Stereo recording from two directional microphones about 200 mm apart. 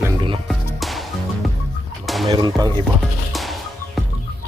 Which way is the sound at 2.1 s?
Centre (ahead or behind).